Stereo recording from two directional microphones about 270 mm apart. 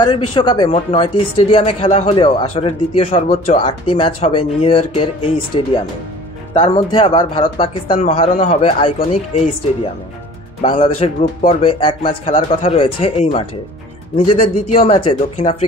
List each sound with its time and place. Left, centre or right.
0.3 s speech: centre
10.6 s speech: centre